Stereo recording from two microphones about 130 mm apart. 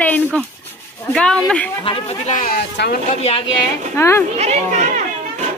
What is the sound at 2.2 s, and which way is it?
Speech, 75° left (ahead or behind).